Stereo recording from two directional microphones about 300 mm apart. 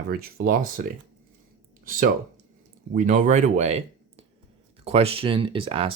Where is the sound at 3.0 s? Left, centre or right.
Right.